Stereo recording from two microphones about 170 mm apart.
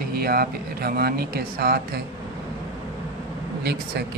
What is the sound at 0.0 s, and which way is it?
Speech, 65° right (ahead or behind).